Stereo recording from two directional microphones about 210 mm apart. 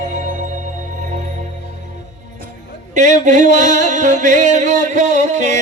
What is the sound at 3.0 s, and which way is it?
Music, 35° right (ahead or behind).